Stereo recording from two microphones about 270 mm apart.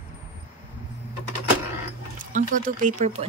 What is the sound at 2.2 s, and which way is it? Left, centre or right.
Speech, right.